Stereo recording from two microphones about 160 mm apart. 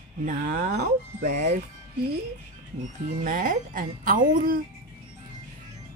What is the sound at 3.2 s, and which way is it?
A woman's voice, 55° right (ahead or behind).